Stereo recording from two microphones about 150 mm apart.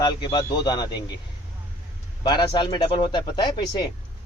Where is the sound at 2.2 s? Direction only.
30° left (ahead or behind).